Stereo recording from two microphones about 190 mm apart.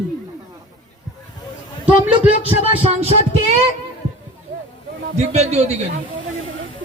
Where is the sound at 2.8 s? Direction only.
30° right (ahead or behind).